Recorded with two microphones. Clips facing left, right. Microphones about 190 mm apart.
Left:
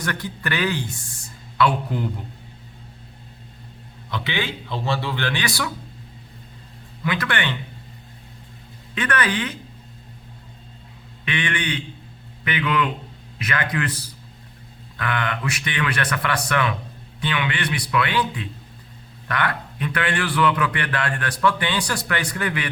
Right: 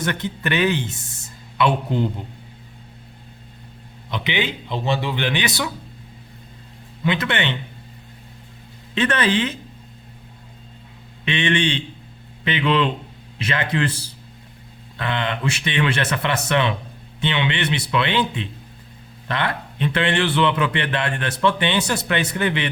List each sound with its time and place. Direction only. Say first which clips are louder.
0.0 s speech: right 3 dB; 20° right (ahead or behind)
4.1 s a man's voice: right 3 dB; 20° right (ahead or behind)
7.0 s a man's voice: right 3 dB; 25° right (ahead or behind)
9.0 s a man's voice: right 4 dB; 25° right (ahead or behind)
11.3 s a man's voice: right 5 dB; 25° right (ahead or behind)